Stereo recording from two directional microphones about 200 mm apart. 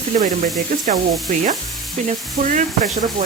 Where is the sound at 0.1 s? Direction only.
35° right (ahead or behind).